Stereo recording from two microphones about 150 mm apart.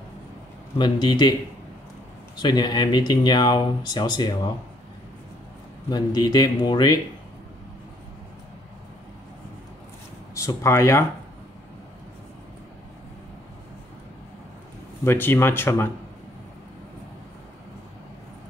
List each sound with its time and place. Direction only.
0.7 s speech: 30° left (ahead or behind)
2.3 s speech: 30° left (ahead or behind)
5.9 s speech: 25° left (ahead or behind)
10.3 s speech: 20° left (ahead or behind)
15.0 s speech: 15° left (ahead or behind)